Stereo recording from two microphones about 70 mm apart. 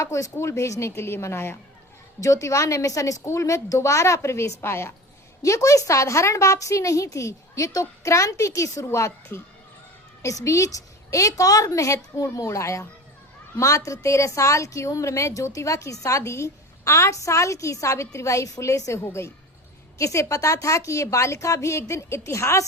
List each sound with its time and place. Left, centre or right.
0.0 s a woman's voice: left
2.2 s a woman's voice: left
5.4 s a woman's voice: left